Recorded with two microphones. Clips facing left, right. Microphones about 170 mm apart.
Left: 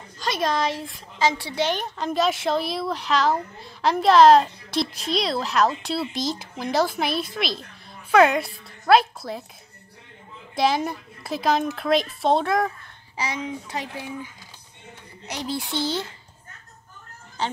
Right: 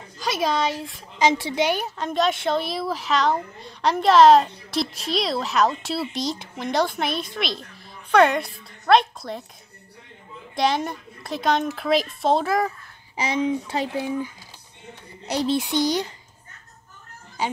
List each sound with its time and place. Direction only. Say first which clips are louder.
0.2 s a woman's voice: right 1 dB; centre (ahead or behind)
1.1 s a woman's voice: right 3 dB; 20° right (ahead or behind); by 9.4 s 5° left (ahead or behind)
10.5 s a woman's voice: left 1 dB; centre (ahead or behind)
13.1 s speech: right 6 dB; 25° right (ahead or behind)
15.5 s a child's voice: right 3 dB; 15° right (ahead or behind)
17.4 s speech: right 1 dB; 10° right (ahead or behind)